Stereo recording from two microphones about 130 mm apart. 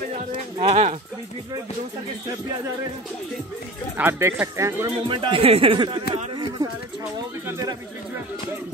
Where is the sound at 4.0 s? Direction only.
20° right (ahead or behind).